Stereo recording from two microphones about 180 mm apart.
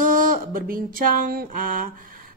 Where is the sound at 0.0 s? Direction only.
50° right (ahead or behind).